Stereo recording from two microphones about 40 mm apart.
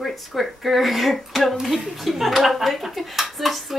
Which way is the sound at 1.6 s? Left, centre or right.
Centre.